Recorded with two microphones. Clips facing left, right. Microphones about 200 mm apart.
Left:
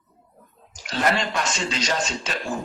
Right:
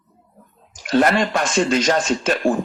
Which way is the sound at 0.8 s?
55° right (ahead or behind).